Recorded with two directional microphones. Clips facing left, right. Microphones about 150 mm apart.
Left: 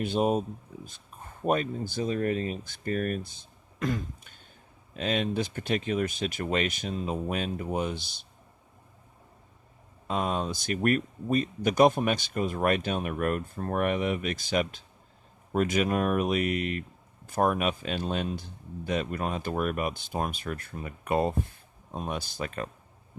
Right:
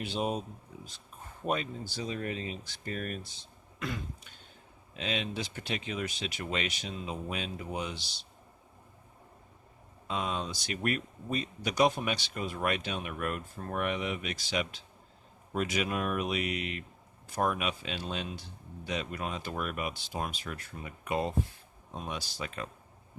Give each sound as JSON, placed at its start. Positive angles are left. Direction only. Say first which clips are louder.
{"t": 0.0, "sound": "speech", "louder": "left 7 dB", "side_deg": 50}
{"t": 10.1, "sound": "speech", "louder": "left 5 dB", "side_deg": 50}